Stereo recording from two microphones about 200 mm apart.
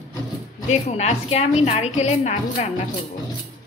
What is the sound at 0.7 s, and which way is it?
A woman's voice, 35° left (ahead or behind).